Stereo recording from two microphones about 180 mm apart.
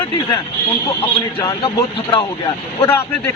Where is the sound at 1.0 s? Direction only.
20° left (ahead or behind).